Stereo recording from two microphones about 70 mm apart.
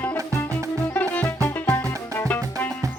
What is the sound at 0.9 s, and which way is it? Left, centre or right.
Music, left.